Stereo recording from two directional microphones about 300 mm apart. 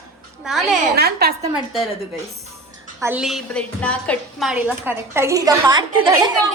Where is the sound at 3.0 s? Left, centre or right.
Centre.